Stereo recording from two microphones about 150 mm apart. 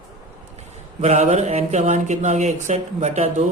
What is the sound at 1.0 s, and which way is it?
Speech, 50° right (ahead or behind).